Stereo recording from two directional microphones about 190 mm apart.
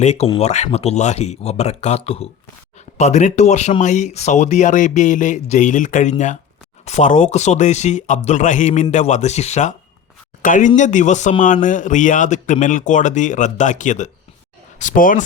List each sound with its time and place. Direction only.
0.0 s a man's voice: 35° left (ahead or behind)